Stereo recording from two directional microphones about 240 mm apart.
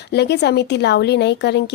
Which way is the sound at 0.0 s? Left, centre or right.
Left.